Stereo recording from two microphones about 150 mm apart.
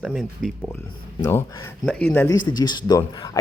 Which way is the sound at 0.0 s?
Centre (ahead or behind).